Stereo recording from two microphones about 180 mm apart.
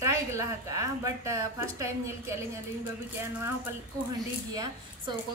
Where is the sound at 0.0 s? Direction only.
15° right (ahead or behind).